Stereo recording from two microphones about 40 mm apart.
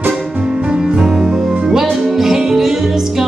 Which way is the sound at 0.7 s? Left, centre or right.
Centre.